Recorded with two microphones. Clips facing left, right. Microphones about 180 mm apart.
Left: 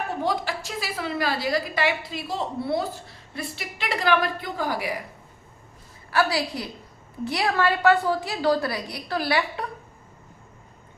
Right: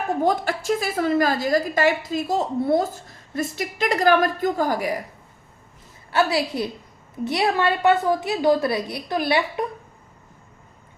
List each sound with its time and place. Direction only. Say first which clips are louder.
0.2 s a woman's voice: right 5 dB; 50° right (ahead or behind)
6.1 s a woman's voice: right 3 dB; 25° right (ahead or behind)